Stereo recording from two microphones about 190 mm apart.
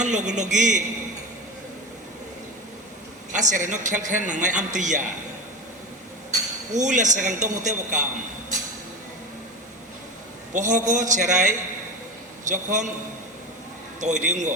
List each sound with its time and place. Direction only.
0.0 s a man's voice: 40° right (ahead or behind)
3.3 s a man's voice: 40° right (ahead or behind)
6.7 s a man's voice: 40° right (ahead or behind)
10.5 s a man's voice: 40° right (ahead or behind)
14.0 s a man's voice: 40° right (ahead or behind)